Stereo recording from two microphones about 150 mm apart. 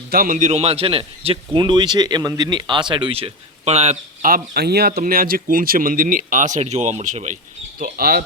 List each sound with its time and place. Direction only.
0.1 s a man's voice: 70° right (ahead or behind); by 4.3 s 45° right (ahead or behind)
4.3 s speech: 80° right; by 7.3 s 55° right (ahead or behind)
7.8 s speech: 80° right